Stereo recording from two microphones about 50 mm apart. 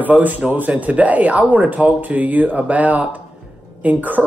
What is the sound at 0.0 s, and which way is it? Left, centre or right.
A woman's voice, right.